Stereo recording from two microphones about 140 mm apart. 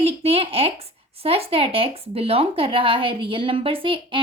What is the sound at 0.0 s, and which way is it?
A woman's voice, 45° right (ahead or behind).